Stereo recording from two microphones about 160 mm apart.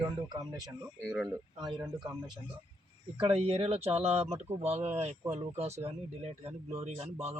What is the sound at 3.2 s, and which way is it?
Speech, 35° right (ahead or behind).